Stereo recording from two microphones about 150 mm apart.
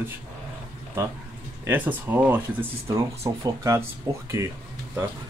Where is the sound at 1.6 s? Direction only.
15° right (ahead or behind).